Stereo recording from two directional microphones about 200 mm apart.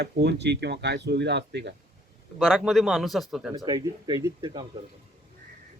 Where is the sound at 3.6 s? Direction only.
20° right (ahead or behind).